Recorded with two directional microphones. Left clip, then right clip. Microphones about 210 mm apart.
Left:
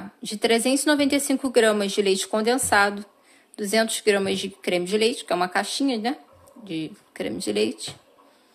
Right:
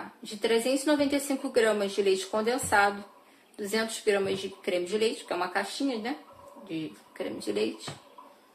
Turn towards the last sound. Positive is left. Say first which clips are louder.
# left 6 dB
turn(degrees=45)  # may be behind; listen again after turning